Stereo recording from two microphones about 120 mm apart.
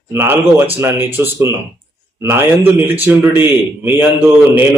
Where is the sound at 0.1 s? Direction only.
20° right (ahead or behind).